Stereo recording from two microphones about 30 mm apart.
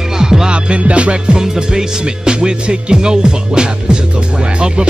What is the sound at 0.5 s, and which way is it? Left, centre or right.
Music, right.